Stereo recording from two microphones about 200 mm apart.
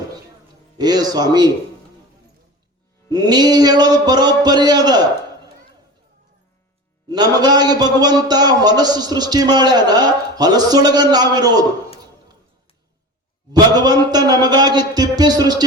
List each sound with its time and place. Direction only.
0.8 s a man's voice: 20° right (ahead or behind)
3.1 s a man's voice: 20° right (ahead or behind)
7.1 s a man's voice: 20° right (ahead or behind)
13.5 s a man's voice: 20° right (ahead or behind)